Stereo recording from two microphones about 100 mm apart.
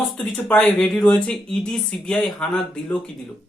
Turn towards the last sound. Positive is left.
turn(degrees=10)  # may be behind; listen again after turning